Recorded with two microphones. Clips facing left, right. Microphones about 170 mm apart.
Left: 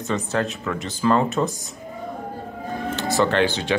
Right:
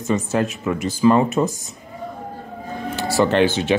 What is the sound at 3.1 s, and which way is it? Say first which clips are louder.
Speech: right 4 dB; 20° right (ahead or behind).